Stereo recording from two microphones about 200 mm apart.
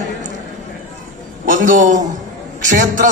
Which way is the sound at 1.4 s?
40° right (ahead or behind).